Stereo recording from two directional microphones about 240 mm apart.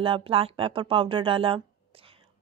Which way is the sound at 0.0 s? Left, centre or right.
Right.